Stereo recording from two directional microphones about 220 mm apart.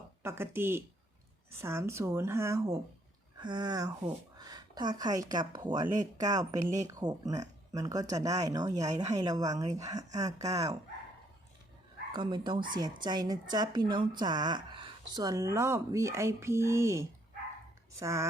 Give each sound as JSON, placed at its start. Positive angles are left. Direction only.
{"t": 0.2, "sound": "speech", "side_deg": -10}
{"t": 12.1, "sound": "speech", "side_deg": -20}